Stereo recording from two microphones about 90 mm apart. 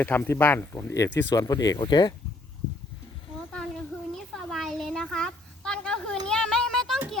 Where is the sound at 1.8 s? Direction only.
55° left (ahead or behind).